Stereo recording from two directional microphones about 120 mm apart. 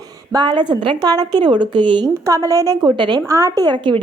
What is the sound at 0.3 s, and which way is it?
A woman's voice, 40° right (ahead or behind).